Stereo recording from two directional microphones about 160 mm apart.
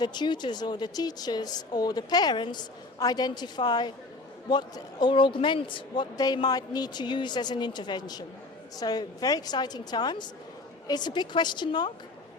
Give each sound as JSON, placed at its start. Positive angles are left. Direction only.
{"t": 0.0, "sound": "a woman's voice", "side_deg": 25}